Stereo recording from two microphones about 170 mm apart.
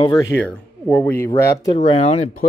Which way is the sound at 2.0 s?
40° left (ahead or behind).